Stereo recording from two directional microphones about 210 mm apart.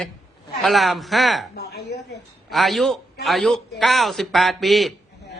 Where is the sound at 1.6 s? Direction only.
50° left (ahead or behind).